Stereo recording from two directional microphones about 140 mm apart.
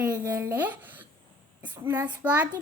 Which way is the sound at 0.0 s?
10° right (ahead or behind).